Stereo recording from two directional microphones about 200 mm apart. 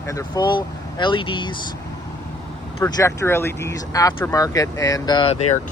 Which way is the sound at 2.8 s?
15° left (ahead or behind).